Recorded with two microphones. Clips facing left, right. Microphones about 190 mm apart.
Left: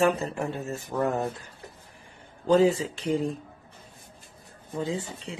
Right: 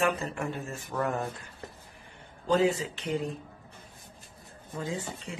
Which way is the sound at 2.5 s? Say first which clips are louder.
Left 5 dB; 35° left (ahead or behind).